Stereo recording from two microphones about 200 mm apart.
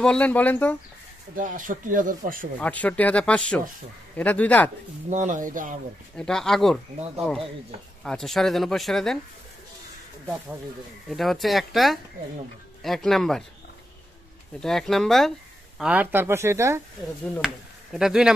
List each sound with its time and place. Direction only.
0.0 s speech: 5° left (ahead or behind)
1.3 s speech: 40° right (ahead or behind)
2.6 s speech: 5° left (ahead or behind)
5.1 s speech: 40° right (ahead or behind)
6.1 s speech: 5° left (ahead or behind)
11.1 s speech: centre (ahead or behind)
14.6 s speech: centre (ahead or behind)
17.9 s speech: 5° right (ahead or behind)